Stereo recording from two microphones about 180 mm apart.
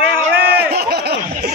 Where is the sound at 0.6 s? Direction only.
65° right (ahead or behind).